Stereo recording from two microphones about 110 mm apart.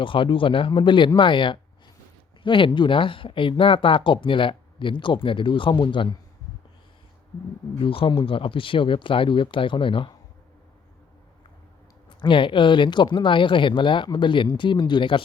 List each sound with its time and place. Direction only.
0.0 s speech: 50° left (ahead or behind)
7.8 s speech: 55° left (ahead or behind)
12.0 s speech: 50° left (ahead or behind)